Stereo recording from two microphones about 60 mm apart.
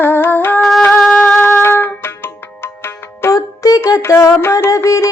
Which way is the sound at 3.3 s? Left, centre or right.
Left.